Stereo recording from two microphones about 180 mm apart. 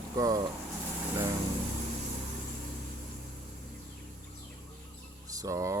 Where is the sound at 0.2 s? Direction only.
20° right (ahead or behind).